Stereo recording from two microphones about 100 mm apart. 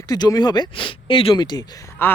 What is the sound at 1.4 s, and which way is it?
Speech, 45° left (ahead or behind).